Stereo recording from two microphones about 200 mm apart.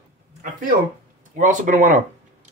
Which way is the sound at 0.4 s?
45° right (ahead or behind).